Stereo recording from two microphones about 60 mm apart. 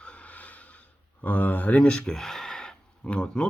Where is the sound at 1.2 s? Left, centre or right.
Left.